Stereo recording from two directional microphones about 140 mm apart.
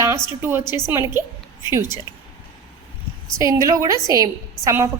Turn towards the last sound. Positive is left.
turn(degrees=-20)  # may be behind; listen again after turning